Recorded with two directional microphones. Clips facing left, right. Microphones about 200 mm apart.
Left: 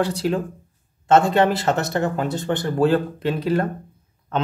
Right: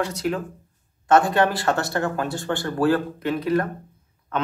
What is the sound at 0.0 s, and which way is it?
Speech, 30° left (ahead or behind).